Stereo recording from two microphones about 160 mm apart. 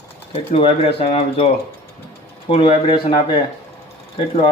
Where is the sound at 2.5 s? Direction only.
35° left (ahead or behind).